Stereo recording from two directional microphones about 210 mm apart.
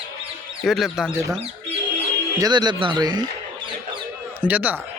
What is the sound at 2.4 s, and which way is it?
Speech, 20° right (ahead or behind).